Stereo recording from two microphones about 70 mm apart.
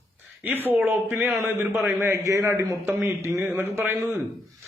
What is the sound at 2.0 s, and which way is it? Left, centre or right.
A man's voice, right.